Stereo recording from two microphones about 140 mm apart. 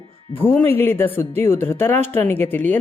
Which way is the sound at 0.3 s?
15° left (ahead or behind).